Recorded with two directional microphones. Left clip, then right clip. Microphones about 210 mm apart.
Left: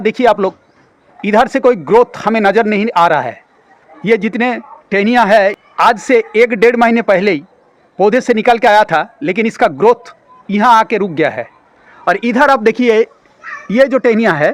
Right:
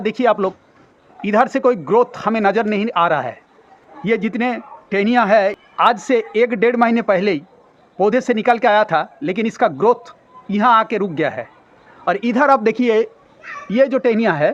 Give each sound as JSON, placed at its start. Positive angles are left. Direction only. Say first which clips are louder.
{"t": 0.0, "sound": "a man's voice", "louder": "left 5 dB", "side_deg": 55}